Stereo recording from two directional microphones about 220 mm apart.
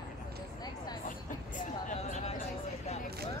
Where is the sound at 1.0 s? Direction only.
35° left (ahead or behind).